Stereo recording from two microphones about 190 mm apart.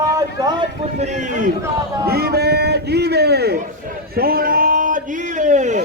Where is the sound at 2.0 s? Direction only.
55° right (ahead or behind).